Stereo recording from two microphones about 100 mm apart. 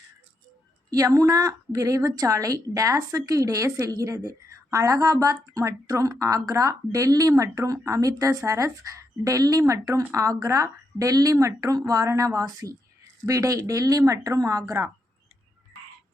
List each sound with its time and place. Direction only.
0.9 s a woman's voice: 35° right (ahead or behind)